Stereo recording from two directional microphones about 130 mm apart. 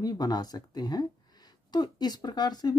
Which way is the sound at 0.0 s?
30° left (ahead or behind).